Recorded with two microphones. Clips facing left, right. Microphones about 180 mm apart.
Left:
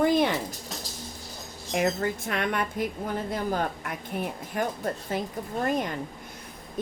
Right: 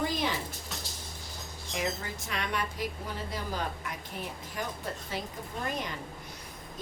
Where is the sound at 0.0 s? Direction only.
55° left (ahead or behind).